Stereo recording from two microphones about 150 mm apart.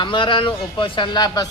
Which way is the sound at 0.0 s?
35° left (ahead or behind).